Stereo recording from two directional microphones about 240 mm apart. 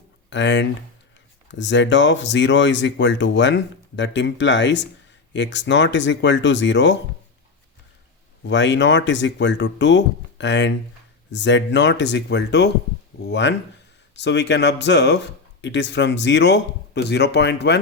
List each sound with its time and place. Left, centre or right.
0.3 s speech: left
8.4 s speech: left